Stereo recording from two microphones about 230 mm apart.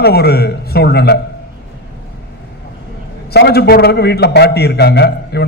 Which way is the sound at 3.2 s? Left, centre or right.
Left.